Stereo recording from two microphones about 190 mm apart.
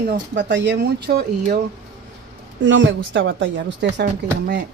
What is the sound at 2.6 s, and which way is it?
A woman's voice, 75° right (ahead or behind).